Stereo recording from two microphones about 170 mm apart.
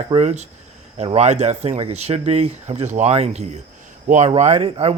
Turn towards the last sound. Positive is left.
turn(degrees=-35)  # may be behind; listen again after turning